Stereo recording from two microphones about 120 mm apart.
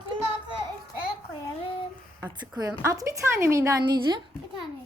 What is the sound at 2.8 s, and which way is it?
Speech, 25° right (ahead or behind).